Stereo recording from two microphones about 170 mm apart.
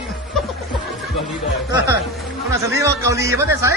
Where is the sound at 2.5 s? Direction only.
20° right (ahead or behind).